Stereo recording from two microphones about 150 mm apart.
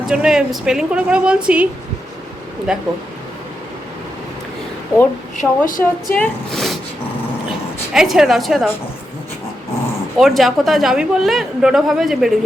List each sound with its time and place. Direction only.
0.0 s a woman's voice: 5° right (ahead or behind)
2.7 s a woman's voice: 5° right (ahead or behind)
5.4 s a woman's voice: 65° left (ahead or behind)
6.1 s a woman's voice: centre (ahead or behind)
7.9 s a woman's voice: 5° right (ahead or behind)
10.2 s a woman's voice: centre (ahead or behind)